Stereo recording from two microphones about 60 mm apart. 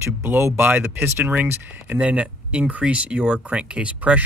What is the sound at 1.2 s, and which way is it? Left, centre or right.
Speech, right.